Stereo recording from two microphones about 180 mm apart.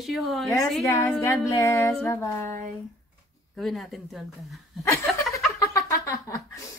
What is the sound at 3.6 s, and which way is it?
Speech, centre (ahead or behind).